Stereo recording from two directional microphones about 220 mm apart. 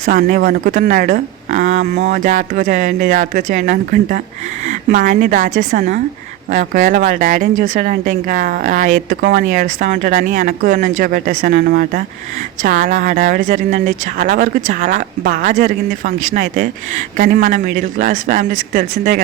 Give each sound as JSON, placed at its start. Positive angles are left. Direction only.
{"t": 0.0, "sound": "speech", "side_deg": -40}